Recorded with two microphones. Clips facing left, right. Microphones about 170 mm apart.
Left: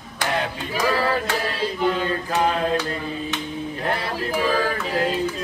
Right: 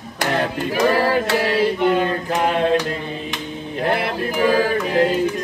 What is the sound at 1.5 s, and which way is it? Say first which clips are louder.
Carnatic music: right 6 dB; 65° right (ahead or behind).